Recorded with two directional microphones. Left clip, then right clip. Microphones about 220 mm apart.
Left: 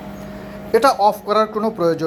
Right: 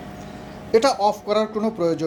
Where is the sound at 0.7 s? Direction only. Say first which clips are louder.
Left 4 dB; 5° right (ahead or behind).